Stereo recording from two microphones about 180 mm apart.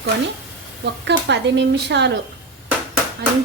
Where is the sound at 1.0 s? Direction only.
75° right (ahead or behind).